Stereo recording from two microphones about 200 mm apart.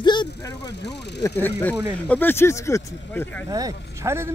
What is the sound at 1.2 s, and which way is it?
Speech, 10° left (ahead or behind).